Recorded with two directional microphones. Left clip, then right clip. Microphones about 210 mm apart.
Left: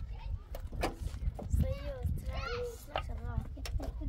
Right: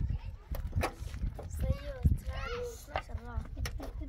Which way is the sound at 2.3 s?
50° right (ahead or behind).